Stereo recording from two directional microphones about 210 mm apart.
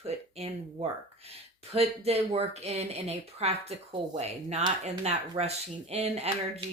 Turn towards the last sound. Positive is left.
turn(degrees=-30)  # may be behind; listen again after turning